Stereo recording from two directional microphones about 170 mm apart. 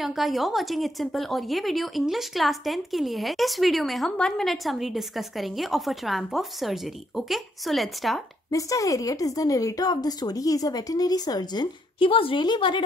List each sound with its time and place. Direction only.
0.0 s a woman's voice: centre (ahead or behind)
8.5 s a woman's voice: 20° left (ahead or behind)